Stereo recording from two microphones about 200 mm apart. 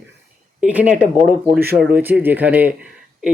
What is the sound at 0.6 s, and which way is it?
Speech, 5° right (ahead or behind).